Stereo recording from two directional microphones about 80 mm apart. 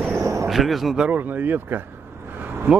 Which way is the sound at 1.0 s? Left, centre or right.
Right.